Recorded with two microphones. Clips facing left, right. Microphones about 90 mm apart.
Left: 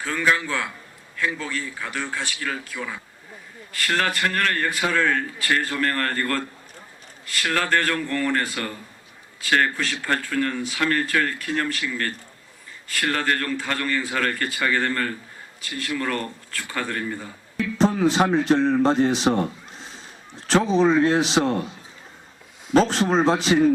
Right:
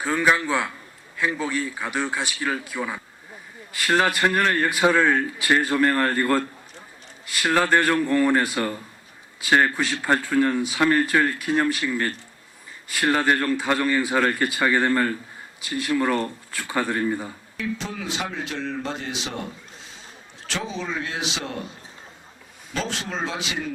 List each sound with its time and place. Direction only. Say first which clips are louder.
0.0 s a man's voice: right 2 dB; 20° right (ahead or behind)
17.6 s speech: left 10 dB; 40° left (ahead or behind)
20.5 s speech: left 11 dB; 40° left (ahead or behind)
22.7 s speech: left 11 dB; 40° left (ahead or behind)